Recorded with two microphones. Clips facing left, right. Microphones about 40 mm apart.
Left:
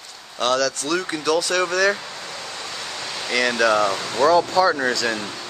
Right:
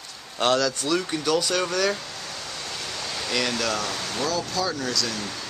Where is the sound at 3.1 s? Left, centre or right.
Left.